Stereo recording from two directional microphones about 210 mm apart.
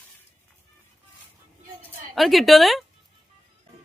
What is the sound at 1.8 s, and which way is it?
A woman's voice, centre (ahead or behind).